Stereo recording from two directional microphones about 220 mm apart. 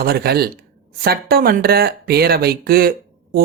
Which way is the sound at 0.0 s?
45° right (ahead or behind).